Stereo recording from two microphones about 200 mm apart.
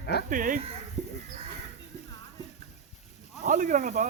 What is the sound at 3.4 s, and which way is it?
Speech, 40° right (ahead or behind).